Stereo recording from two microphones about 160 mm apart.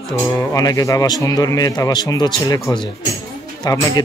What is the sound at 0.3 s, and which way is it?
A man's voice, 20° left (ahead or behind).